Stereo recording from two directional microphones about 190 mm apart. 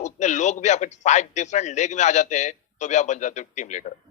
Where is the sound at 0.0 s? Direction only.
40° left (ahead or behind).